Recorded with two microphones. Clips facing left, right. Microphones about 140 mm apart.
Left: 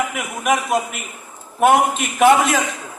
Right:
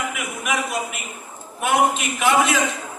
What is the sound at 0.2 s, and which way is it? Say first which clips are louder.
A man's voice: left 5 dB; 45° left (ahead or behind).